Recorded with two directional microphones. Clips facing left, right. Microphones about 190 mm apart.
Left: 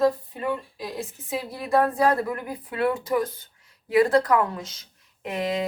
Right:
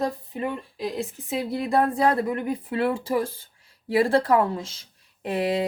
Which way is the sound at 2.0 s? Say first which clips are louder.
Right 1 dB; 20° right (ahead or behind).